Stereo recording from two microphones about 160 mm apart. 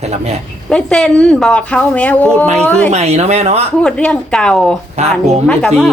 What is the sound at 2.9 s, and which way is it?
Speech, 45° right (ahead or behind).